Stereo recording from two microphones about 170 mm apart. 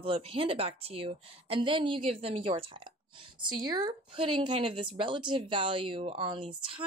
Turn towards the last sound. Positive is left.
turn(degrees=-30)  # may be behind; listen again after turning